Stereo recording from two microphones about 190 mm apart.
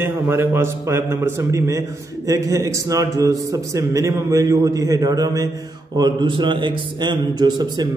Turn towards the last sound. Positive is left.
turn(degrees=-20)  # may be behind; listen again after turning